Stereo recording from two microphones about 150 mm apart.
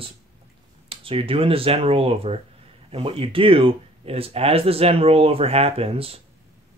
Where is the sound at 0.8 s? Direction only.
35° right (ahead or behind).